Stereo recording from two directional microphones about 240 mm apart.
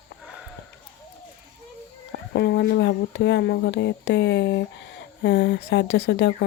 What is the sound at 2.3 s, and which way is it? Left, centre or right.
Speech, left.